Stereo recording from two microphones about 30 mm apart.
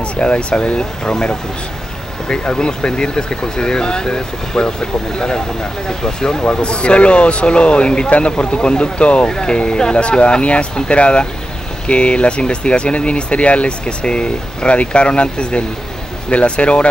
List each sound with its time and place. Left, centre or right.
0.2 s speech: left
2.2 s speech: left
5.9 s speech: left
6.5 s speech: left
9.3 s speech: left